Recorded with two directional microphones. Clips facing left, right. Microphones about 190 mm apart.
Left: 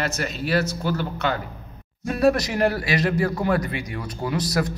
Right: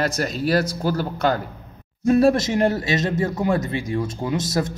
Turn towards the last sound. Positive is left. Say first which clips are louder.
# right 1 dB
turn(degrees=-25)  # may be behind; listen again after turning